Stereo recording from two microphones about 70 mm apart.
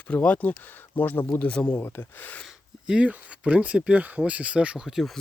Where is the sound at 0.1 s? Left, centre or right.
Left.